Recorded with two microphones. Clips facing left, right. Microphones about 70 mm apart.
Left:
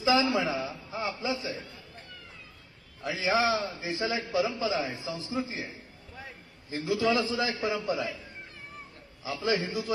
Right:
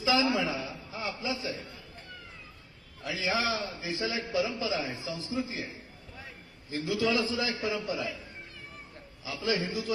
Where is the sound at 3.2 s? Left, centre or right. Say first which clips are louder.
Left 4 dB; centre.